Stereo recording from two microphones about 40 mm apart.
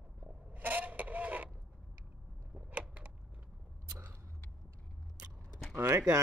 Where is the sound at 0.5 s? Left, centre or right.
Right.